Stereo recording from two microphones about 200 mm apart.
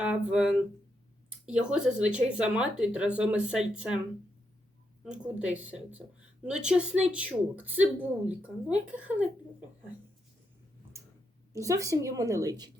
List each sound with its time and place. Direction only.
0.0 s speech: 5° right (ahead or behind)
5.1 s a woman's voice: 5° right (ahead or behind)
11.5 s a woman's voice: 15° right (ahead or behind)